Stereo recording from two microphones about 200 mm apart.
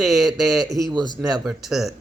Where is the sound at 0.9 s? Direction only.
20° right (ahead or behind).